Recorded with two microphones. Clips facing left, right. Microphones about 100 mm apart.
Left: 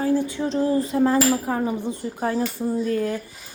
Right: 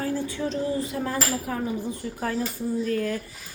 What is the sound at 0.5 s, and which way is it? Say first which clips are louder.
A woman's voice: left 10 dB; 35° left (ahead or behind).